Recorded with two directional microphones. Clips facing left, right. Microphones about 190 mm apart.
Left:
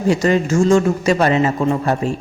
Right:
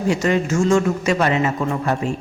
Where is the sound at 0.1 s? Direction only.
35° left (ahead or behind).